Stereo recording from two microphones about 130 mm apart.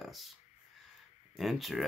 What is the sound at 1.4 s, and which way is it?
Speech, centre (ahead or behind).